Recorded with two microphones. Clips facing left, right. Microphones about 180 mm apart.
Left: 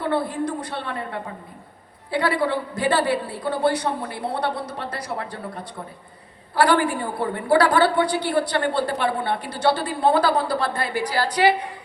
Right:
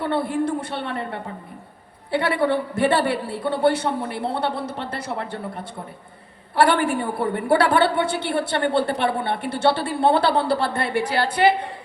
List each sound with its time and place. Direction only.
0.0 s a woman's voice: 25° right (ahead or behind)
6.6 s a woman's voice: 25° right (ahead or behind)
11.3 s a woman's voice: 55° right (ahead or behind)